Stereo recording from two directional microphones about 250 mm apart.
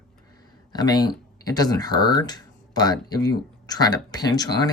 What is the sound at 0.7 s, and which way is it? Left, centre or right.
Speech, centre.